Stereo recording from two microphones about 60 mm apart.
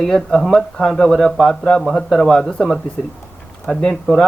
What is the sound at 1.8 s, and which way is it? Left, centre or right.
Speech, centre.